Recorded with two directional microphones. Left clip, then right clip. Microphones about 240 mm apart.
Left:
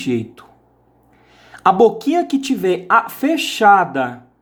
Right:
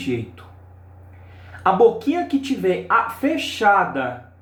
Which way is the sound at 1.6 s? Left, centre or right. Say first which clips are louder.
Left 3 dB; left.